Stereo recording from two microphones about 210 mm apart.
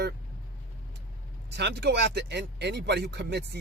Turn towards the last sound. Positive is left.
turn(degrees=-55)  # may be behind; listen again after turning